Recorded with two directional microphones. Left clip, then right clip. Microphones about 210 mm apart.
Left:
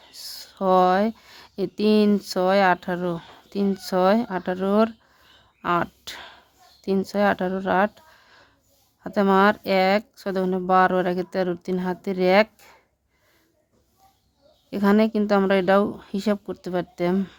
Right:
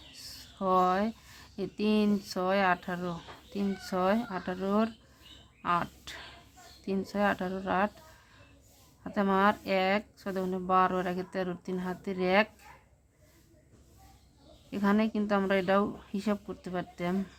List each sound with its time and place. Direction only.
0.1 s speech: 50° left (ahead or behind)
9.0 s speech: 50° left (ahead or behind)
14.7 s speech: 50° left (ahead or behind)